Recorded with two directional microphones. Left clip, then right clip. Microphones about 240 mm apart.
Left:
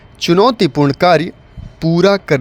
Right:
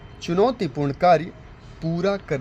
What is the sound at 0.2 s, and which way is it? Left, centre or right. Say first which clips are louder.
A man's voice: left 10 dB; left.